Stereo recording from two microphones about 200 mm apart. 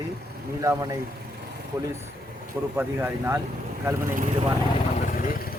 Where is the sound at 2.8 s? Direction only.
10° right (ahead or behind).